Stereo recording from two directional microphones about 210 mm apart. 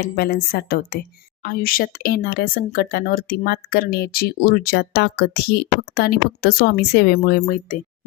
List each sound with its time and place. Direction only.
0.0 s a woman's voice: 45° left (ahead or behind)